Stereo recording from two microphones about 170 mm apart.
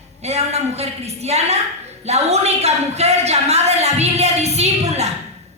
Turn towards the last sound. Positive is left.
turn(degrees=-40)  # may be behind; listen again after turning